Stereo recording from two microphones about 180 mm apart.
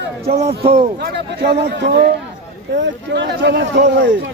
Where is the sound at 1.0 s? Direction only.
65° right (ahead or behind).